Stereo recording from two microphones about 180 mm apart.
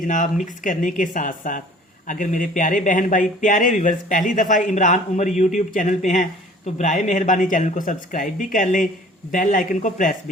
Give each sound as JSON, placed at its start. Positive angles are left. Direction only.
{"t": 0.0, "sound": "speech", "side_deg": 45}